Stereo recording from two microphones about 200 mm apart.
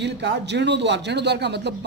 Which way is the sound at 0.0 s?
60° right (ahead or behind).